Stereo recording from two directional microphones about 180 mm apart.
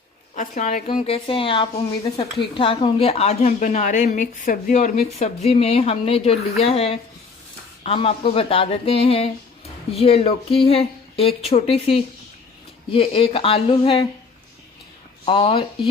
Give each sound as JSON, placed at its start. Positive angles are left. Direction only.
{"t": 0.3, "sound": "a woman's voice", "side_deg": 45}
{"t": 0.9, "sound": "a woman's voice", "side_deg": 35}
{"t": 15.3, "sound": "speech", "side_deg": 30}